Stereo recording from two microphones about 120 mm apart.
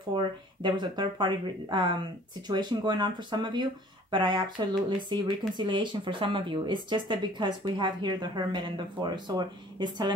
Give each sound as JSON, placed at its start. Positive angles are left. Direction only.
{"t": 0.1, "sound": "speech", "side_deg": -40}